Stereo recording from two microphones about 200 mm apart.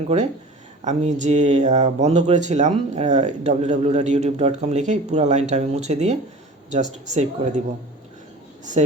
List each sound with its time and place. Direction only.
0.9 s speech: 35° right (ahead or behind)